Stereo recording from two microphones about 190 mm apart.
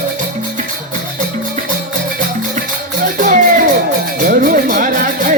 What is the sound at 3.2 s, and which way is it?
Music, 45° right (ahead or behind).